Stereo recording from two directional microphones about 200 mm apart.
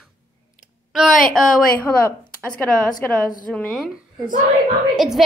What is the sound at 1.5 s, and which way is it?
A woman's voice, 10° left (ahead or behind).